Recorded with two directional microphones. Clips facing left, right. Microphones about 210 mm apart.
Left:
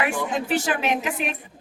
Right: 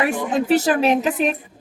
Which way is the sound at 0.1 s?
35° right (ahead or behind).